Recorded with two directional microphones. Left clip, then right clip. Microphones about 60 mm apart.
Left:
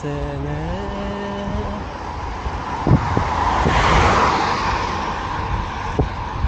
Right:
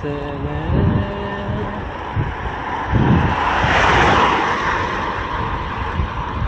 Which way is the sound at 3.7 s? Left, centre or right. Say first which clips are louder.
Right 3 dB; right.